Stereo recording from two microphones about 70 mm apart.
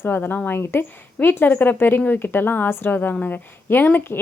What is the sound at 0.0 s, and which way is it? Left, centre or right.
Speech, left.